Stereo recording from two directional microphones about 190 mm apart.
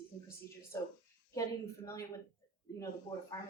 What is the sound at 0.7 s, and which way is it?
A woman's voice, 15° left (ahead or behind).